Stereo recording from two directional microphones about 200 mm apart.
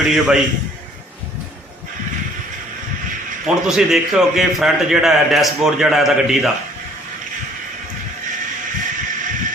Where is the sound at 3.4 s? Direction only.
5° right (ahead or behind).